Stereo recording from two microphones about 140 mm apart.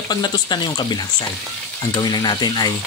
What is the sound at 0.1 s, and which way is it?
Speech, 30° left (ahead or behind).